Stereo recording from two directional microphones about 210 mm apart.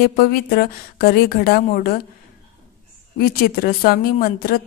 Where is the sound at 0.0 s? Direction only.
45° left (ahead or behind).